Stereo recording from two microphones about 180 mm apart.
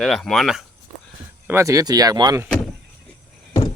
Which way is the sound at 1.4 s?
15° right (ahead or behind).